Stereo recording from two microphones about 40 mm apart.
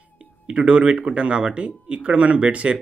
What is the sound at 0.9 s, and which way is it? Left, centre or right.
Speech, right.